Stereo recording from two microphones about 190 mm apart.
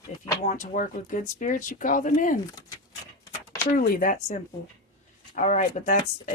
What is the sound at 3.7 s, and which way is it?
Speech, 45° left (ahead or behind).